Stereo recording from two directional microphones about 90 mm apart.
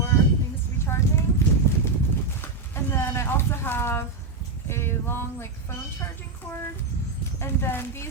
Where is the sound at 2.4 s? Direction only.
25° left (ahead or behind).